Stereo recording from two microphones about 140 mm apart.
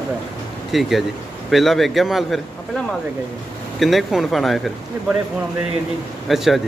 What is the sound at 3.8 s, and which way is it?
Speech, centre (ahead or behind).